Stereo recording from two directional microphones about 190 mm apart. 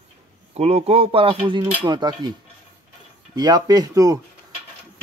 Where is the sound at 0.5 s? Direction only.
30° right (ahead or behind).